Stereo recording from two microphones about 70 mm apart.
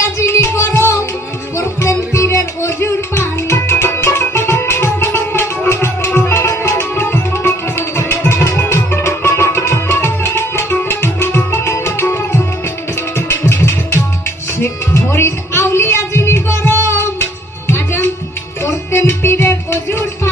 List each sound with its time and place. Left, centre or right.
0.0 s music: left